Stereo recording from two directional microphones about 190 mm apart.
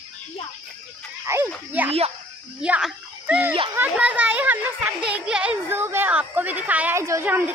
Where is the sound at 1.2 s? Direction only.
15° right (ahead or behind).